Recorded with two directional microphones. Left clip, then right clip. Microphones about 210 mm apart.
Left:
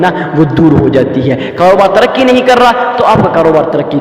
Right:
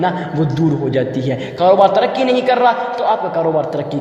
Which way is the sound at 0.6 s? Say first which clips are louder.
Left 9 dB; 25° left (ahead or behind).